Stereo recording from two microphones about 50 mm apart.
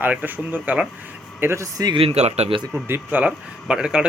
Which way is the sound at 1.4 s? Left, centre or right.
Right.